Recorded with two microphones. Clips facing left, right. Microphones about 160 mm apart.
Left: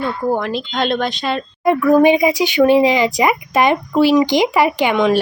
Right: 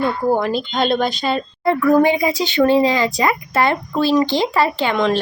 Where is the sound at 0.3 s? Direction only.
Centre (ahead or behind).